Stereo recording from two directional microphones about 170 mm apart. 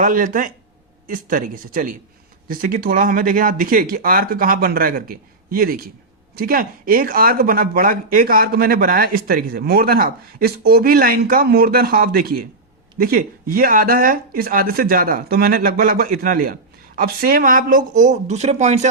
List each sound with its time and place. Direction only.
0.0 s speech: 50° right (ahead or behind)